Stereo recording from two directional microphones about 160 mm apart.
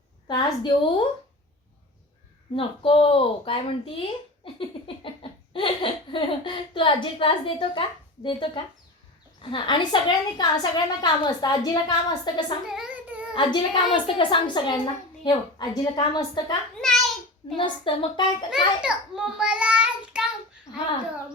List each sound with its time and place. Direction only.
0.3 s a child's voice: 30° left (ahead or behind)
2.6 s a child's voice: 35° left (ahead or behind)
12.6 s a sound: 5° right (ahead or behind)
13.3 s a child's voice: 30° left (ahead or behind)
17.6 s a child's voice: 30° left (ahead or behind)
18.5 s a child's voice: 5° right (ahead or behind)